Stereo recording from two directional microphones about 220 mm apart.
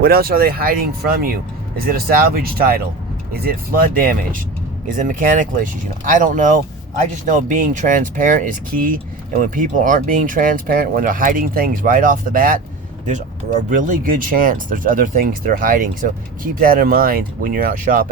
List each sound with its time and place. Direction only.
0.0 s speech: 45° right (ahead or behind)
13.7 s speech: 35° right (ahead or behind)